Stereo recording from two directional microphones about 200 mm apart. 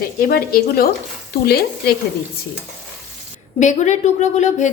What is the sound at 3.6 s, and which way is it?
A woman's voice, 35° left (ahead or behind).